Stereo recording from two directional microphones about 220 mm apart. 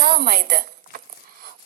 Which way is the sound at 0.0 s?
45° right (ahead or behind).